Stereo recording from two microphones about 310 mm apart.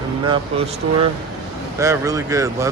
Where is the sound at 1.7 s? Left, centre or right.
Centre.